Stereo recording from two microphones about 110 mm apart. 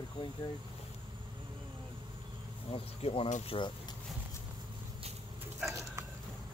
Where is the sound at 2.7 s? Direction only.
60° left (ahead or behind).